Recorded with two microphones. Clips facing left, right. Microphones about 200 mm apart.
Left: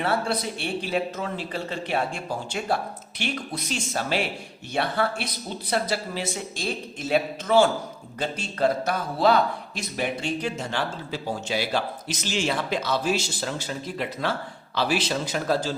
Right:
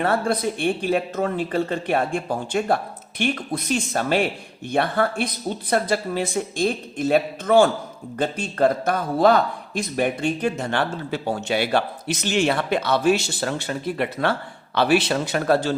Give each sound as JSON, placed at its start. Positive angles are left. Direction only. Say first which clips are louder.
{"t": 0.0, "sound": "a man's voice", "louder": "right 4 dB", "side_deg": -50}